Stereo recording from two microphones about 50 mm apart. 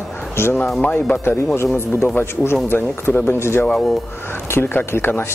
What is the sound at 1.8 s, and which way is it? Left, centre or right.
Speech, left.